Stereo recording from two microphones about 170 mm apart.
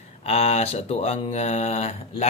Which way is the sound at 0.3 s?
40° left (ahead or behind).